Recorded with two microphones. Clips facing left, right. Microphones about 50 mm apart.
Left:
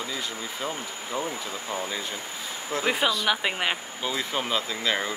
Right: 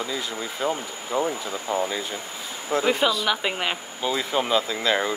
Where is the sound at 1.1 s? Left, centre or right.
Right.